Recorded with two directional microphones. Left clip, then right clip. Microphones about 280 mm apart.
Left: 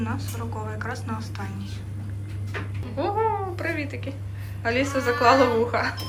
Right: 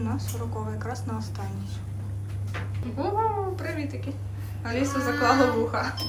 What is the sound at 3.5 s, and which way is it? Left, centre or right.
Cat, centre.